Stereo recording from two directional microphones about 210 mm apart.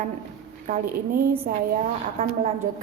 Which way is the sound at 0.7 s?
40° right (ahead or behind).